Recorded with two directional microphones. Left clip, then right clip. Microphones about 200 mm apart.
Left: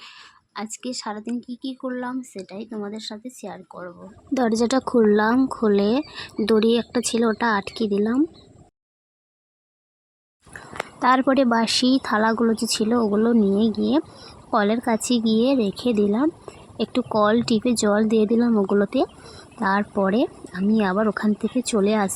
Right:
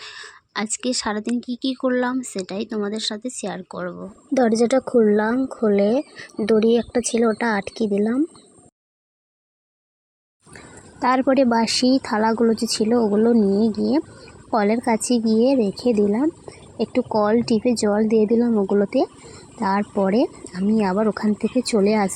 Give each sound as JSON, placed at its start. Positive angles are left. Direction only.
{"t": 0.0, "sound": "a woman's voice", "side_deg": -15}
{"t": 4.4, "sound": "speech", "side_deg": -5}
{"t": 11.0, "sound": "speech", "side_deg": 5}
{"t": 14.5, "sound": "a woman's voice", "side_deg": 0}